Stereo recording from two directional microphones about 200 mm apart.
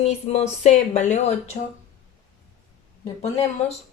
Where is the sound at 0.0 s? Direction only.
35° left (ahead or behind).